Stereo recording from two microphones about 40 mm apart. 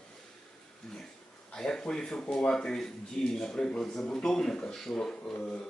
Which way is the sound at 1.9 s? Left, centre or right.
Centre.